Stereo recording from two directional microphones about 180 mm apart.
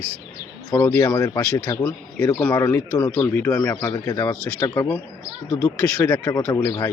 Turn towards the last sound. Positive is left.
turn(degrees=20)  # may be behind; listen again after turning